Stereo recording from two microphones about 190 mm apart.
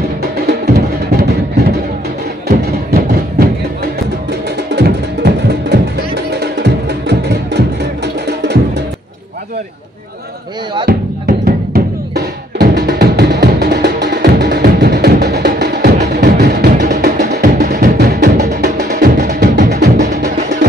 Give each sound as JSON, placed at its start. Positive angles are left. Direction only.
{"t": 0.2, "sound": "music", "side_deg": -55}
{"t": 10.9, "sound": "music", "side_deg": -55}